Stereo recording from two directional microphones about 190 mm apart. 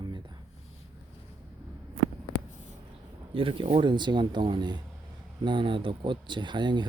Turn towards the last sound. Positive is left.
turn(degrees=-25)  # may be behind; listen again after turning